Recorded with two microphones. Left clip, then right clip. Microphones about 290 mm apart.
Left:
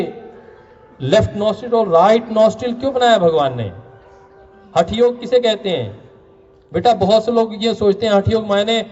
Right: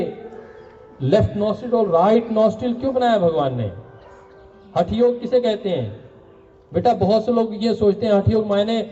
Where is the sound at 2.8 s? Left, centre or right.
Centre.